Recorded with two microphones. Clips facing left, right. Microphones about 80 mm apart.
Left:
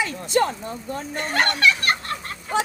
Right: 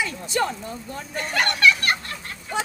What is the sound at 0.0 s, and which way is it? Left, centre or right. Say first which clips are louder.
Speech: left 3 dB; left.